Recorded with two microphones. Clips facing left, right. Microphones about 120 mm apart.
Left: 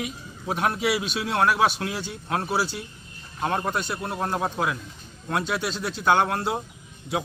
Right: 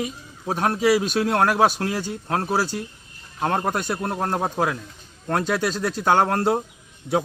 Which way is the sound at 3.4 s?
50° right (ahead or behind).